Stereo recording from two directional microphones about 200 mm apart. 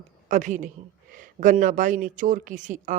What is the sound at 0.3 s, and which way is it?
Speech, 40° right (ahead or behind).